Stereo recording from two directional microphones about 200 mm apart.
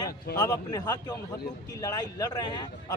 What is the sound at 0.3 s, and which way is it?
A man's voice, 20° left (ahead or behind).